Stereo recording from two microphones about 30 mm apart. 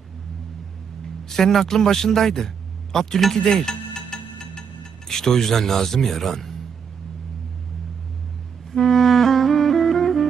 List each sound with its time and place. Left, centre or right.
1.0 s music: centre
1.7 s a sound: centre
5.0 s speech: centre
8.7 s music: centre